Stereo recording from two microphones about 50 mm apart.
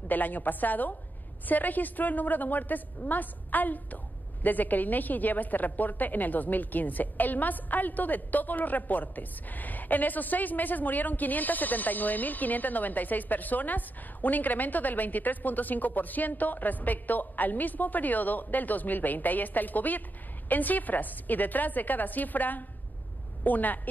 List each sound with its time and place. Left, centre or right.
0.1 s a woman's voice: left